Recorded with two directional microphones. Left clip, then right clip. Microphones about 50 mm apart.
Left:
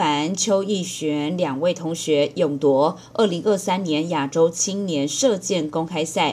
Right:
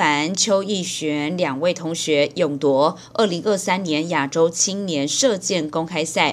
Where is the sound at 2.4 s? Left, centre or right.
Left.